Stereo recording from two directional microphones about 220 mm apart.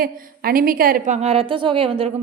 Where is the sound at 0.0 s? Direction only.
40° right (ahead or behind).